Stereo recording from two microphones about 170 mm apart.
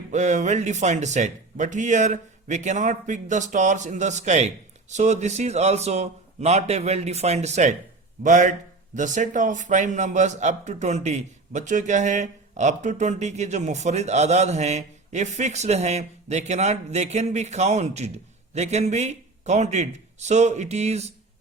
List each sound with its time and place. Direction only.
0.1 s a man's voice: 45° right (ahead or behind)